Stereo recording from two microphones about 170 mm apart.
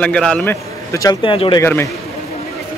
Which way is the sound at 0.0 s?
5° left (ahead or behind).